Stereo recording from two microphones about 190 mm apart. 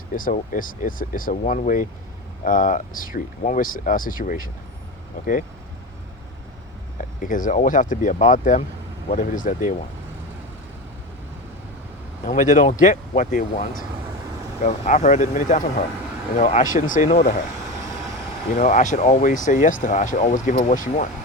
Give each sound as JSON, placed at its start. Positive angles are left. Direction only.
{"t": 0.1, "sound": "speech", "side_deg": 45}
{"t": 7.2, "sound": "speech", "side_deg": 45}
{"t": 12.2, "sound": "speech", "side_deg": 45}
{"t": 18.5, "sound": "speech", "side_deg": 40}